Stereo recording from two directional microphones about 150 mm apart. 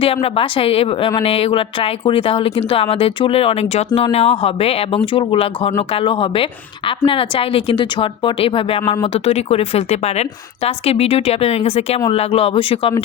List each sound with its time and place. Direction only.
0.0 s a woman's voice: 40° left (ahead or behind)